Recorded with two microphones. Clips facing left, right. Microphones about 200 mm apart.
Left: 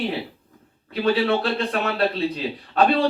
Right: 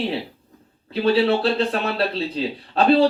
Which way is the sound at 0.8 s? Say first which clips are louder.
Right 2 dB; 30° right (ahead or behind).